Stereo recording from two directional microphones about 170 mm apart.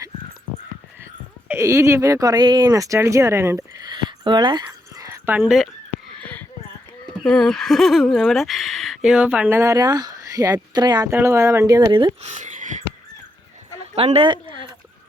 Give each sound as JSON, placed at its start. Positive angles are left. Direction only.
{"t": 1.5, "sound": "speech", "side_deg": -15}
{"t": 5.0, "sound": "dog", "side_deg": -15}
{"t": 6.1, "sound": "a sound", "side_deg": 10}
{"t": 7.3, "sound": "speech", "side_deg": 5}
{"t": 12.2, "sound": "a sound", "side_deg": -45}
{"t": 13.9, "sound": "speech", "side_deg": -35}